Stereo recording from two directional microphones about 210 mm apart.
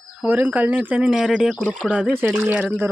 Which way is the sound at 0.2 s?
10° right (ahead or behind).